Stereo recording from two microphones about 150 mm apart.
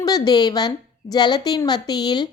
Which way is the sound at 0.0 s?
25° left (ahead or behind).